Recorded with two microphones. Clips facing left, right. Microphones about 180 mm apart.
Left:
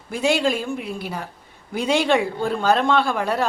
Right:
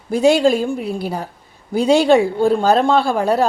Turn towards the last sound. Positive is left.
turn(degrees=-35)  # may be behind; listen again after turning